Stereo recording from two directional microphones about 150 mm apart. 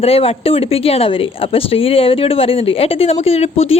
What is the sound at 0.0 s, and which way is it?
A woman's voice, 40° left (ahead or behind).